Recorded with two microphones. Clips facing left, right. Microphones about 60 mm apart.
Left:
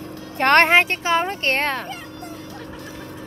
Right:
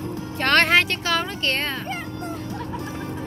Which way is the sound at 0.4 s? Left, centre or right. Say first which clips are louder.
Left 4 dB; left.